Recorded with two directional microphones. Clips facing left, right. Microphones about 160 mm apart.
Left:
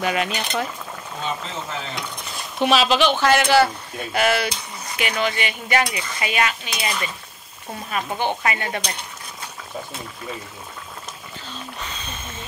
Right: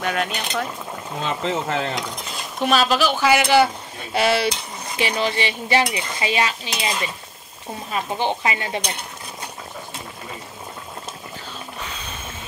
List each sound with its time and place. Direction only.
0.0 s speech: 5° left (ahead or behind)
1.2 s speech: 80° right
2.6 s speech: centre (ahead or behind); by 4.5 s 30° right (ahead or behind)
4.9 s dishes: 30° right (ahead or behind)